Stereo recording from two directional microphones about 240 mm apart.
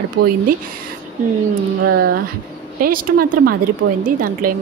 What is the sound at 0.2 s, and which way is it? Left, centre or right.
Speech, right.